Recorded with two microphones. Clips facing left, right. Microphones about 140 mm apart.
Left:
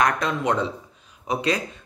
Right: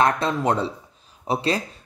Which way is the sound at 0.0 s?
30° right (ahead or behind).